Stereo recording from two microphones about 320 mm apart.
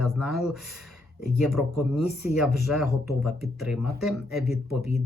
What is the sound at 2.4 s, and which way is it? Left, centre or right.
Speech, centre.